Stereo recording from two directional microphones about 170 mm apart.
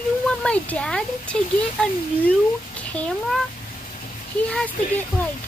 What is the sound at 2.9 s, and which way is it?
Speech, 5° left (ahead or behind).